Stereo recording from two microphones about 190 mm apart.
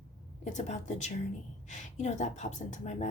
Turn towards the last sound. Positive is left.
turn(degrees=35)  # may be behind; listen again after turning